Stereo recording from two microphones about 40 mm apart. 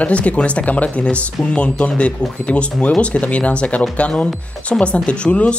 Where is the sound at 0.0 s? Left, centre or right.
Left.